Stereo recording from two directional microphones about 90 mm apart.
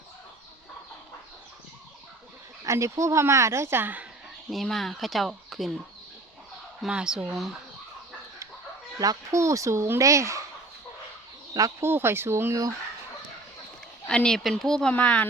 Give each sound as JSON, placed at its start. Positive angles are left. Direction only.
{"t": 2.6, "sound": "speech", "side_deg": -35}
{"t": 4.5, "sound": "speech", "side_deg": 0}
{"t": 6.8, "sound": "speech", "side_deg": -10}
{"t": 9.0, "sound": "speech", "side_deg": -40}
{"t": 11.8, "sound": "speech", "side_deg": -25}
{"t": 14.1, "sound": "speech", "side_deg": 10}